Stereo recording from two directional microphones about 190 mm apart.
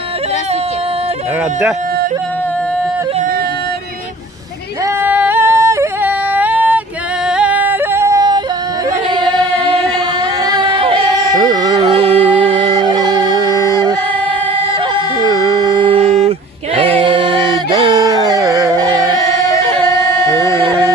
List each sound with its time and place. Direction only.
5.0 s yodeling: 10° right (ahead or behind)
10.4 s a sound: 25° right (ahead or behind)
11.3 s carnatic music: 20° right (ahead or behind)
15.2 s music: 20° right (ahead or behind)
20.5 s music: 25° right (ahead or behind)